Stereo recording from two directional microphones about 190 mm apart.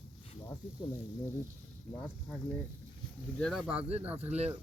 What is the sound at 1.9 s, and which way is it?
Speech, 5° left (ahead or behind).